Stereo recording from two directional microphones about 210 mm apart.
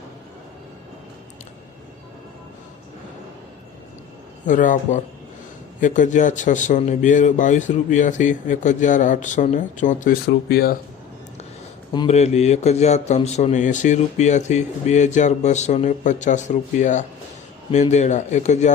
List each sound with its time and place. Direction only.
4.4 s a man's voice: 40° left (ahead or behind)
11.9 s a man's voice: 30° left (ahead or behind)